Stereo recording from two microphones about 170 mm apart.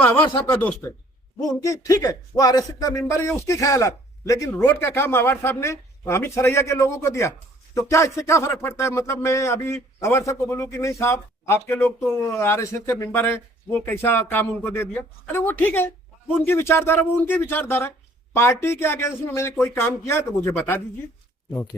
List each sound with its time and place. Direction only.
0.6 s speech: 15° left (ahead or behind)